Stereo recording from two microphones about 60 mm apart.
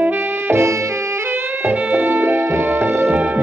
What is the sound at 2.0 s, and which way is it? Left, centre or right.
Music, right.